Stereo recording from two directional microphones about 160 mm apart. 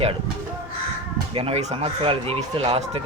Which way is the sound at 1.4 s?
35° right (ahead or behind).